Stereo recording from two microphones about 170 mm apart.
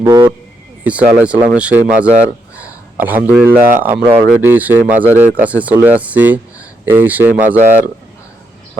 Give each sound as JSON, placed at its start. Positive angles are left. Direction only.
{"t": 0.0, "sound": "speech", "side_deg": -20}
{"t": 0.9, "sound": "a man's voice", "side_deg": -10}